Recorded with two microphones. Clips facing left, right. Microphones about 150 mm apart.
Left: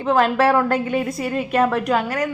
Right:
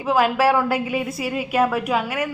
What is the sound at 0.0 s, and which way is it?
Speech, 5° right (ahead or behind).